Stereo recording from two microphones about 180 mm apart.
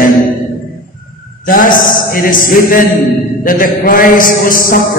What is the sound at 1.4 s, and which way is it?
Speech, 50° left (ahead or behind).